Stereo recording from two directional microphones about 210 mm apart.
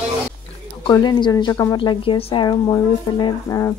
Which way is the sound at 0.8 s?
20° left (ahead or behind).